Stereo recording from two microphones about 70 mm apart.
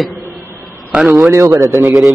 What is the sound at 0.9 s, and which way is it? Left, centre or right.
Speech, centre.